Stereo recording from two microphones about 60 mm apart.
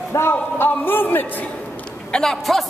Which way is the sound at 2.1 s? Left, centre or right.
Centre.